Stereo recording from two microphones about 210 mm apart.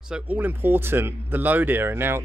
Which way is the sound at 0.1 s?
10° right (ahead or behind).